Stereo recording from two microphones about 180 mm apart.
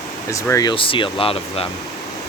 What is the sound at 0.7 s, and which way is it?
Speech, 30° left (ahead or behind).